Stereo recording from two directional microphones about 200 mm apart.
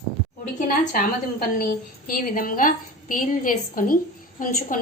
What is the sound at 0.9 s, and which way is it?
A woman's voice, 45° left (ahead or behind).